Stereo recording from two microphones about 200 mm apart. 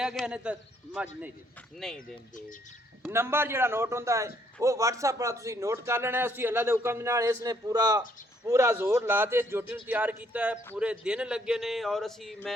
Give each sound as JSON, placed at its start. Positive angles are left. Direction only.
{"t": 0.0, "sound": "speech", "side_deg": -5}
{"t": 2.0, "sound": "speech", "side_deg": 40}
{"t": 3.1, "sound": "speech", "side_deg": -10}